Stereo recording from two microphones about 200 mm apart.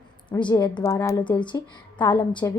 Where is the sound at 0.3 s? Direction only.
25° left (ahead or behind).